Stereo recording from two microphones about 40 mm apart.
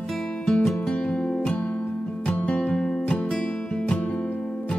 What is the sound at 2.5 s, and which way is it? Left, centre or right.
Music, left.